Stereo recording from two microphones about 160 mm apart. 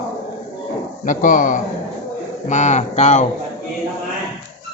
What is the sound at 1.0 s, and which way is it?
A man's voice, 55° left (ahead or behind).